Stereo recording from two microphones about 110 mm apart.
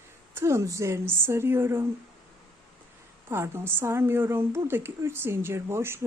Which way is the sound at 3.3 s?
20° right (ahead or behind).